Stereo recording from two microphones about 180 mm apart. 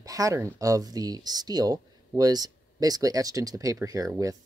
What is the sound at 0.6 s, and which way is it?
Speech, 20° right (ahead or behind).